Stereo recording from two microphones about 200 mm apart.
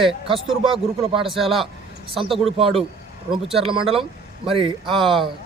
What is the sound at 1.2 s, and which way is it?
Speech, centre (ahead or behind).